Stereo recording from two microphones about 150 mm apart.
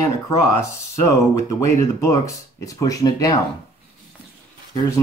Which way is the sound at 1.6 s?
20° left (ahead or behind).